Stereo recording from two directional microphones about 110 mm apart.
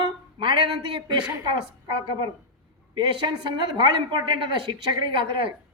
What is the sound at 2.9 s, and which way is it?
Speech, 45° right (ahead or behind).